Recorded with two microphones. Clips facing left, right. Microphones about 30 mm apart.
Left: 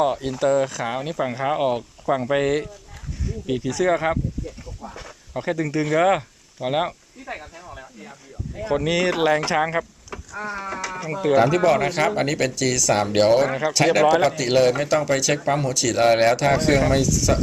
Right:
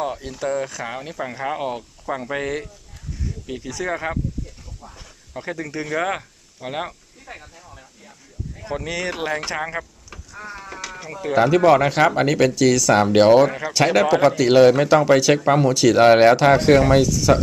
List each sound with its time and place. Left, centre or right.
0.0 s speech: centre
5.3 s speech: centre
5.9 s a sound: centre
7.7 s a sound: left
8.5 s speech: centre
11.3 s speech: centre
13.5 s speech: centre
13.7 s speech: centre